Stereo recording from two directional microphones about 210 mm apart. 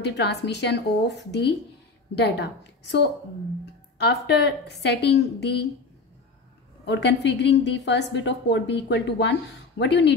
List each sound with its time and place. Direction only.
0.0 s a woman's voice: 55° left (ahead or behind)
6.9 s a woman's voice: 55° left (ahead or behind)